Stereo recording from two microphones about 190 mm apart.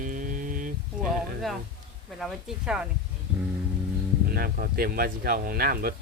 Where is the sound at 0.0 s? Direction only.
45° right (ahead or behind).